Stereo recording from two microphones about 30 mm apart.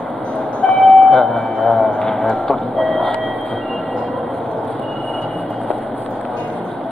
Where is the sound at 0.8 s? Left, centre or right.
Centre.